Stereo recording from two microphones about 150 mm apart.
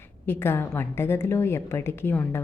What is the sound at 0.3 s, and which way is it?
A woman's voice, 15° left (ahead or behind).